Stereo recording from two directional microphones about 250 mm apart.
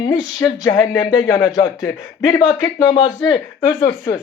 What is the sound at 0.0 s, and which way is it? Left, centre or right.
Speech, centre.